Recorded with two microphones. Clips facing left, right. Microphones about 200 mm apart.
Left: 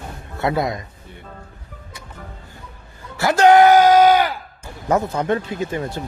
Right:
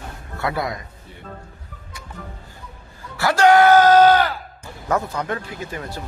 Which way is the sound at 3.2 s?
20° left (ahead or behind).